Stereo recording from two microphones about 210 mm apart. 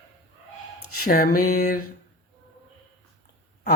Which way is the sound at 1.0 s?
45° left (ahead or behind).